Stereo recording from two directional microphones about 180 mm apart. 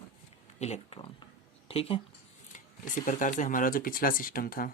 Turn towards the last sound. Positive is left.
turn(degrees=55)  # may be behind; listen again after turning